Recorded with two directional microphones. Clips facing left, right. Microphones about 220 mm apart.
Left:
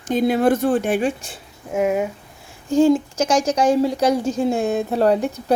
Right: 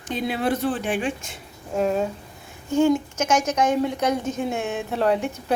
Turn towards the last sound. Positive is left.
turn(degrees=35)  # may be behind; listen again after turning